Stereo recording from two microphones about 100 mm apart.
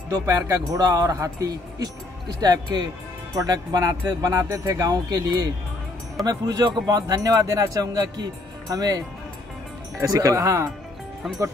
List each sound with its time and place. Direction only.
0.1 s a man's voice: 35° right (ahead or behind)